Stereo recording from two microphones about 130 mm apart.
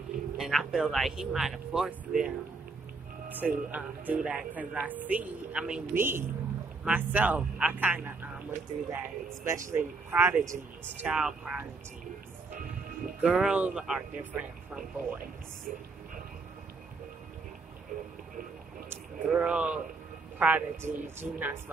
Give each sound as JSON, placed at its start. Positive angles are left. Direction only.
{"t": 0.4, "sound": "speech", "side_deg": 0}
{"t": 11.0, "sound": "speech", "side_deg": -5}
{"t": 13.2, "sound": "speech", "side_deg": -5}
{"t": 18.9, "sound": "a sound", "side_deg": -10}
{"t": 20.3, "sound": "speech", "side_deg": -10}